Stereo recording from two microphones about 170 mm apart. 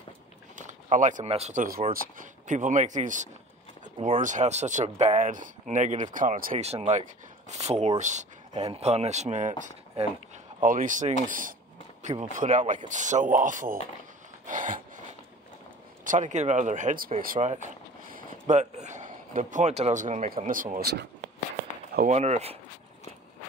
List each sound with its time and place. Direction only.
0.6 s speech: 50° right (ahead or behind)
6.5 s speech: 35° right (ahead or behind)
14.4 s a sound: 50° right (ahead or behind)
16.0 s speech: 50° right (ahead or behind)
18.1 s a sound: 45° right (ahead or behind)
20.4 s speech: 50° right (ahead or behind)
20.8 s speech: 75° right (ahead or behind)
22.1 s speech: 40° right (ahead or behind)